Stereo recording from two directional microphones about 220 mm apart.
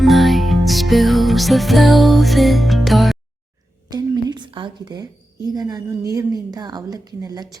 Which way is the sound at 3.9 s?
20° right (ahead or behind).